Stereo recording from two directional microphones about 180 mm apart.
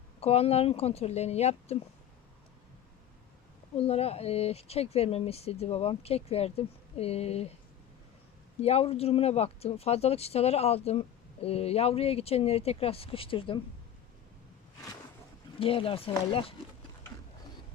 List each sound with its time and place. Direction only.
0.2 s speech: 35° left (ahead or behind)
3.8 s speech: 35° left (ahead or behind)
8.6 s speech: 35° left (ahead or behind)
15.5 s speech: 30° left (ahead or behind)